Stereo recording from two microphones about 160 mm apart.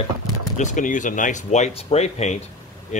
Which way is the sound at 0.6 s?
55° left (ahead or behind).